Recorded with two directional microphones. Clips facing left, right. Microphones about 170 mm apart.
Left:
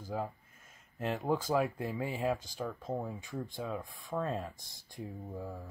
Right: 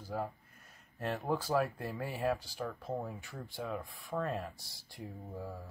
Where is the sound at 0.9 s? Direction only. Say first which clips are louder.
Left 2 dB; 20° left (ahead or behind).